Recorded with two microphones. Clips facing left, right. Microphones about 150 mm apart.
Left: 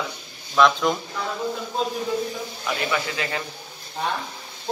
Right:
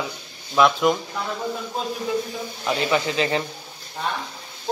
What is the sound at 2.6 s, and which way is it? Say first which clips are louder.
Speech: right 4 dB; 25° right (ahead or behind).